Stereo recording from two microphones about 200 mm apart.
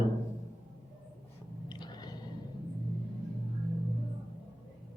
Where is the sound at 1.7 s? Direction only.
20° left (ahead or behind).